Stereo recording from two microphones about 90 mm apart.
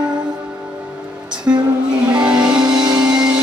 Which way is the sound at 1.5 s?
20° right (ahead or behind).